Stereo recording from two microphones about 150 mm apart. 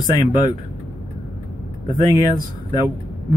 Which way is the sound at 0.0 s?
25° left (ahead or behind).